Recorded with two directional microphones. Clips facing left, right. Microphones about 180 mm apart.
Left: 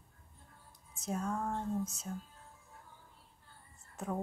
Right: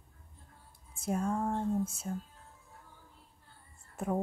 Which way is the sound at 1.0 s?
10° right (ahead or behind).